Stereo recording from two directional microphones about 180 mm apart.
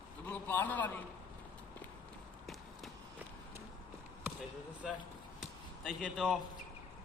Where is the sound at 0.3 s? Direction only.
10° left (ahead or behind).